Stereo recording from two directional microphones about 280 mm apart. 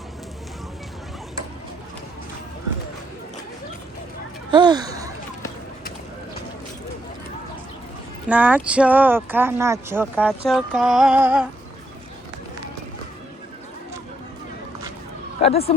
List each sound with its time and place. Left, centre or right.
4.5 s a sound: centre
8.3 s speech: centre
15.4 s speech: left